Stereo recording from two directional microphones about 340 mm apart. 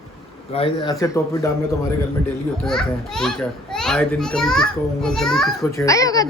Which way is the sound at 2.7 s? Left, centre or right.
Centre.